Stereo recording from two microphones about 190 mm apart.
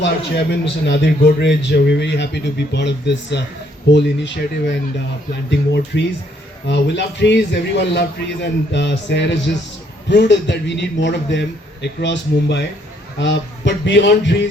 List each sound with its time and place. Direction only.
0.0 s a man's voice: 65° left (ahead or behind)